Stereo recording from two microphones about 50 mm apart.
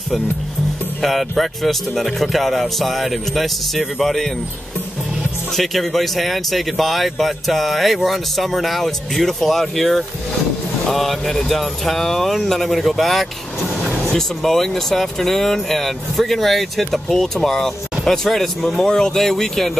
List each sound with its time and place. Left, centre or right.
1.0 s speech: centre
5.5 s speech: centre